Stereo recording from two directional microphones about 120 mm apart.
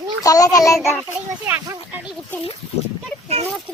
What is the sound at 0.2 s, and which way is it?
Child singing, 30° left (ahead or behind).